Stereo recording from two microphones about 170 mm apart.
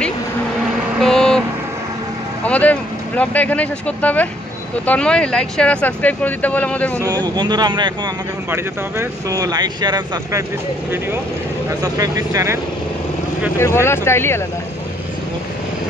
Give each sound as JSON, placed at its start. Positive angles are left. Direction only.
{"t": 1.0, "sound": "vehicle", "side_deg": 5}
{"t": 2.4, "sound": "speech", "side_deg": 10}
{"t": 7.3, "sound": "speech", "side_deg": -25}
{"t": 8.5, "sound": "speech", "side_deg": -15}
{"t": 11.8, "sound": "speech", "side_deg": -20}
{"t": 13.6, "sound": "speech", "side_deg": 15}